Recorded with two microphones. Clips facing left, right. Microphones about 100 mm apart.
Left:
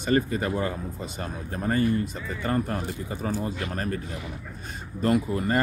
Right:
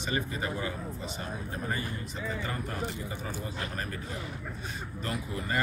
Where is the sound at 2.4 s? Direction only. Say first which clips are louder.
Left 10 dB; 50° left (ahead or behind).